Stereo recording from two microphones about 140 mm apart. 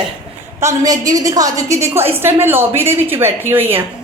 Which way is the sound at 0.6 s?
25° right (ahead or behind).